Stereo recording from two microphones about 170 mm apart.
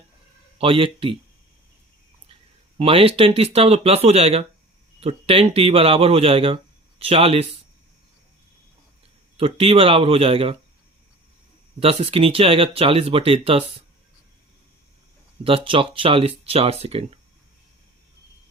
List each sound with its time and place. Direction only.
0.6 s speech: 30° right (ahead or behind)
2.7 s speech: 35° right (ahead or behind)
9.4 s speech: 35° right (ahead or behind)
11.8 s speech: 35° right (ahead or behind)
15.4 s speech: 30° right (ahead or behind)